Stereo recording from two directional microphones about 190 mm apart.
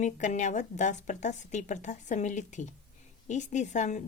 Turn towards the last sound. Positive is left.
turn(degrees=40)  # may be behind; listen again after turning